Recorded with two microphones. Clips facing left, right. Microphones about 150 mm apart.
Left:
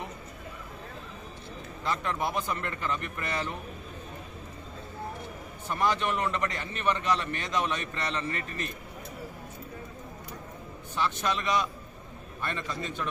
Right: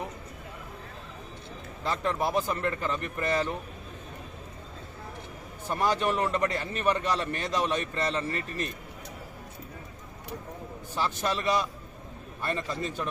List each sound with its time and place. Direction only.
1.8 s a man's voice: 30° right (ahead or behind)
5.6 s a man's voice: 35° right (ahead or behind)
10.9 s a man's voice: 35° right (ahead or behind)